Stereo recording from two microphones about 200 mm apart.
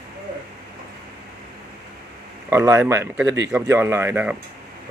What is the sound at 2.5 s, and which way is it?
Speech, 15° right (ahead or behind).